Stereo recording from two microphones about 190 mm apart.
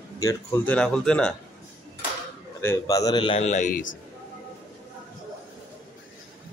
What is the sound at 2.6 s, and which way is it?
Speech, 15° left (ahead or behind).